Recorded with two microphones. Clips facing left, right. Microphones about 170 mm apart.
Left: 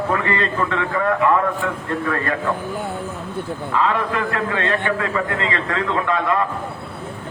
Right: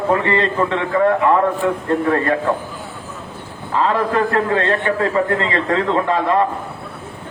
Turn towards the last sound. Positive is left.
turn(degrees=-30)  # may be behind; listen again after turning